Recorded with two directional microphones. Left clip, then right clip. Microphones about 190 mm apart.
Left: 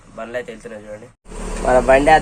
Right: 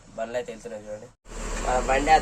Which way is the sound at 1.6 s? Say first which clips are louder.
Left 11 dB; 50° left (ahead or behind).